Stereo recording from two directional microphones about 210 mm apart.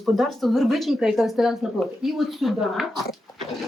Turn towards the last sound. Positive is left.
turn(degrees=0)  # may be behind; listen again after turning